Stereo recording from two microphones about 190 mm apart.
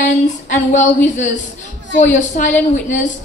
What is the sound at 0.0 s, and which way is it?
A woman's voice, 40° left (ahead or behind).